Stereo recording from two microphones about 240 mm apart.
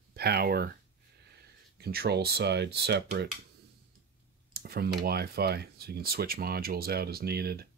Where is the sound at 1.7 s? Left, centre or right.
Right.